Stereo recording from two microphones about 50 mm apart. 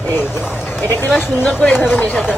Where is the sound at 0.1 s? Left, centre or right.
Left.